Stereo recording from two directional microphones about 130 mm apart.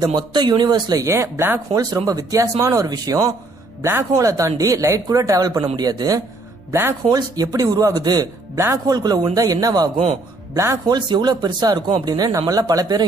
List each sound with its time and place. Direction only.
0.0 s speech: 35° right (ahead or behind)
1.0 s speech: 20° right (ahead or behind)